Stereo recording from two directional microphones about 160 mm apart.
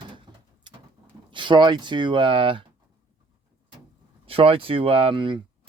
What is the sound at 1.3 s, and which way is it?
Speech, 30° right (ahead or behind).